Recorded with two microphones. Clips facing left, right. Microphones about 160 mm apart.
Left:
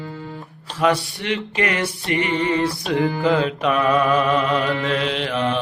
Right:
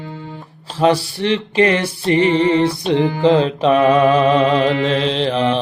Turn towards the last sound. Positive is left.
turn(degrees=-30)  # may be behind; listen again after turning